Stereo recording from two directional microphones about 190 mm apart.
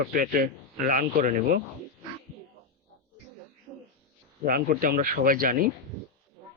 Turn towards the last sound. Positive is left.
turn(degrees=-50)  # may be behind; listen again after turning